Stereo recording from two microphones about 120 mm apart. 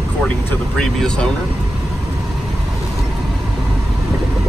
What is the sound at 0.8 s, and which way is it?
Speech, 5° left (ahead or behind).